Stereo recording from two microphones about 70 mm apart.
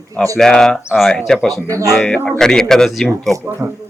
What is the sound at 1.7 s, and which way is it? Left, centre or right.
Speech, right.